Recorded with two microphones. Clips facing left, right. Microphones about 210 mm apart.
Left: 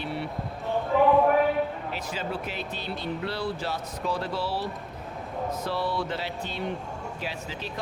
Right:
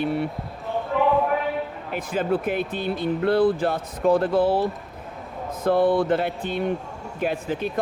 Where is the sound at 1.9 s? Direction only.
55° right (ahead or behind).